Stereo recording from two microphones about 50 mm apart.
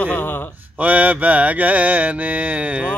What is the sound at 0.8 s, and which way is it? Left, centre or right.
Mantra, right.